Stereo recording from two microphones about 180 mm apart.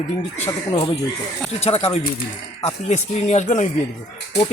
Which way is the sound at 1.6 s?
35° left (ahead or behind).